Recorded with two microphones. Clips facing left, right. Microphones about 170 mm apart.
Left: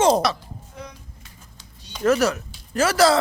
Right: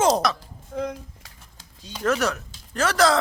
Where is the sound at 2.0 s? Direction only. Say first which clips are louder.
Left 4 dB; centre (ahead or behind).